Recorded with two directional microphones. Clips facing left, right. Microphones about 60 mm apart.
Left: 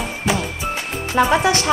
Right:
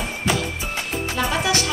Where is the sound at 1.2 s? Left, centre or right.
Left.